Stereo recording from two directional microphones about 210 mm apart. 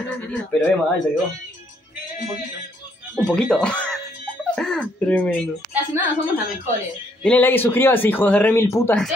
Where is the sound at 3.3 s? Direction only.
5° left (ahead or behind).